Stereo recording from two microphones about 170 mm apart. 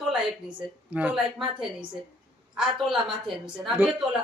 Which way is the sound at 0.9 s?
5° right (ahead or behind).